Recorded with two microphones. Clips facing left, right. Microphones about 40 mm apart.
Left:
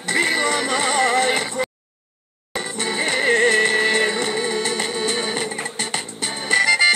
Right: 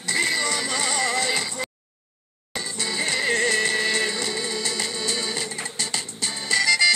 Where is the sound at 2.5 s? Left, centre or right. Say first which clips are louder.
Left 4 dB; left.